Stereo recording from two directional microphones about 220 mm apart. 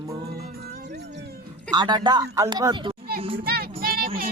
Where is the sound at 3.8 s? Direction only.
40° right (ahead or behind).